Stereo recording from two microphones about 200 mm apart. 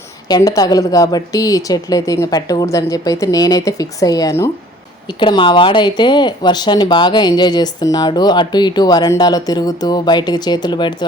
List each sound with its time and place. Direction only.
0.3 s a woman's voice: 20° left (ahead or behind)